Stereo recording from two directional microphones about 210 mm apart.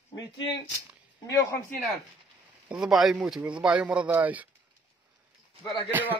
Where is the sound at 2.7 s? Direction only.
Centre (ahead or behind).